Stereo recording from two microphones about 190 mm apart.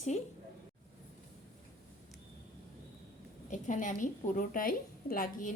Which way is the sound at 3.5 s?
40° left (ahead or behind).